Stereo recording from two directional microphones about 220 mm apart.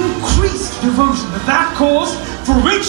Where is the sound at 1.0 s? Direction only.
25° right (ahead or behind).